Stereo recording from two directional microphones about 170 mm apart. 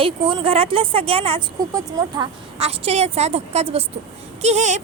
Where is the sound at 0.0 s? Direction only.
30° right (ahead or behind).